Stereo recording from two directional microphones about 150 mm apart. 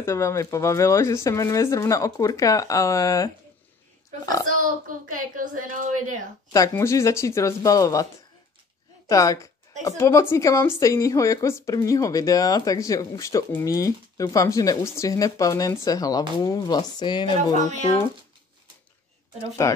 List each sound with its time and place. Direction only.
0.0 s a woman's voice: 20° left (ahead or behind)
4.6 s speech: 65° right (ahead or behind)
6.5 s a woman's voice: 20° left (ahead or behind)
19.6 s a woman's voice: 20° left (ahead or behind)